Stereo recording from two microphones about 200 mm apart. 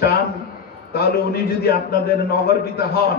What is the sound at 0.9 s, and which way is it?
A man's voice, 50° left (ahead or behind).